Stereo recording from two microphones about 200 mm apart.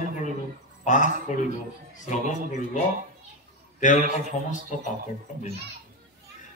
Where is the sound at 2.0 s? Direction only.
35° left (ahead or behind).